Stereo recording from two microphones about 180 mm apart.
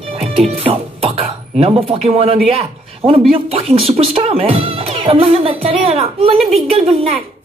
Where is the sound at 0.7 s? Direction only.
35° right (ahead or behind).